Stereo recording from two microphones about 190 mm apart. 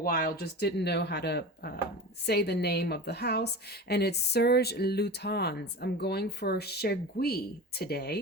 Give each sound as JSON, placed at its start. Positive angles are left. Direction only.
{"t": 0.0, "sound": "a woman's voice", "side_deg": 50}